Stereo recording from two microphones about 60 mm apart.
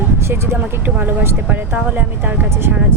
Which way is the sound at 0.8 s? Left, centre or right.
Right.